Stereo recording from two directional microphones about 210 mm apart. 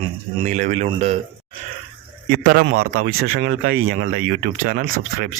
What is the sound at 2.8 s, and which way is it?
Speech, 90° right.